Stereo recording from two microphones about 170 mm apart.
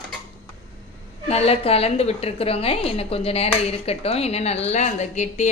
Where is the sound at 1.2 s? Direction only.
35° left (ahead or behind).